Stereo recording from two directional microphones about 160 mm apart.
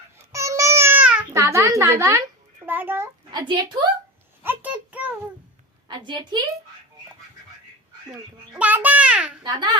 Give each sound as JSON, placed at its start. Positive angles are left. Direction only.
{"t": 0.3, "sound": "babbling", "side_deg": -20}
{"t": 1.3, "sound": "a woman's voice", "side_deg": -20}
{"t": 3.3, "sound": "a woman's voice", "side_deg": -30}
{"t": 4.4, "sound": "a sound", "side_deg": -10}
{"t": 5.9, "sound": "a woman's voice", "side_deg": -30}
{"t": 8.5, "sound": "a child's voice", "side_deg": -10}
{"t": 9.4, "sound": "a woman's voice", "side_deg": -25}